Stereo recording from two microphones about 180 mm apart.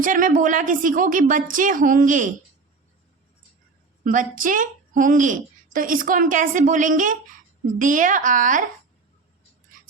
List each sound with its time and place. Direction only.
0.0 s a woman's voice: 50° right (ahead or behind)
4.0 s a woman's voice: 50° right (ahead or behind)